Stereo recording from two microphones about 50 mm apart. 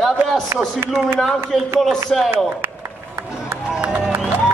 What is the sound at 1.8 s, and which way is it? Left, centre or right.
Speech, centre.